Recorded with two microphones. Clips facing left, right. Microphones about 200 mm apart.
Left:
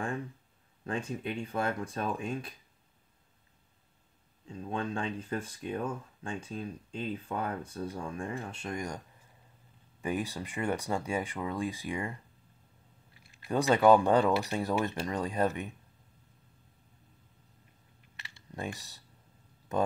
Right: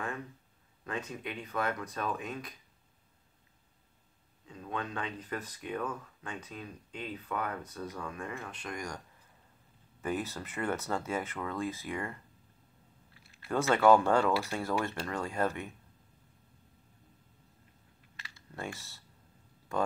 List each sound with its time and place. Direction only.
0.8 s speech: 30° left (ahead or behind)
4.5 s speech: 30° left (ahead or behind)
10.0 s speech: 15° left (ahead or behind)
18.5 s speech: 15° left (ahead or behind)